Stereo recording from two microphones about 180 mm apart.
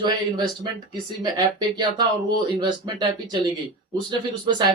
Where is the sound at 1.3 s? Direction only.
25° right (ahead or behind).